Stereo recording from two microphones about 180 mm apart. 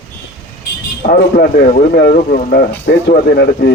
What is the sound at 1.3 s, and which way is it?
Speech, 50° left (ahead or behind).